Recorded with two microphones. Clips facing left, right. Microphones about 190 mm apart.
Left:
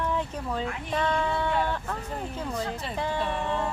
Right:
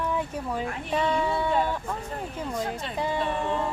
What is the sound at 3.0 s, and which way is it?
Speech, 10° right (ahead or behind).